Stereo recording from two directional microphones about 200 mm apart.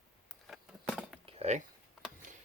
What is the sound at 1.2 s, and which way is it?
Dishes, 30° right (ahead or behind).